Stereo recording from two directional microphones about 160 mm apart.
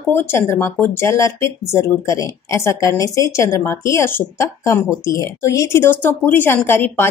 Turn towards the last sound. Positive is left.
turn(degrees=15)  # may be behind; listen again after turning